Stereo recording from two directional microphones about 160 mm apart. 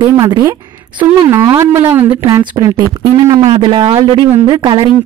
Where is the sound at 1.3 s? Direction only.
20° right (ahead or behind).